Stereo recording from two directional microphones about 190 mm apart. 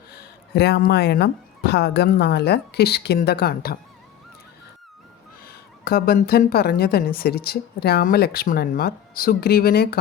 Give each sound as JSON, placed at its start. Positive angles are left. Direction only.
{"t": 0.5, "sound": "speech", "side_deg": 60}
{"t": 5.5, "sound": "speech", "side_deg": 55}